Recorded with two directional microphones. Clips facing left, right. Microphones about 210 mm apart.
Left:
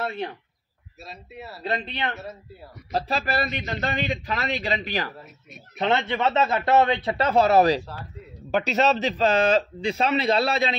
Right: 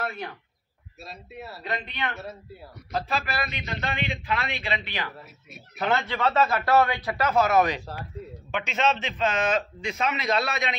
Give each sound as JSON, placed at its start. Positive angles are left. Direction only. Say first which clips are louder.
{"t": 0.0, "sound": "speech", "louder": "left 4 dB", "side_deg": 25}
{"t": 1.0, "sound": "speech", "louder": "even", "side_deg": 0}
{"t": 1.6, "sound": "a man's voice", "louder": "left 4 dB", "side_deg": 30}
{"t": 5.8, "sound": "a man's voice", "louder": "left 3 dB", "side_deg": 25}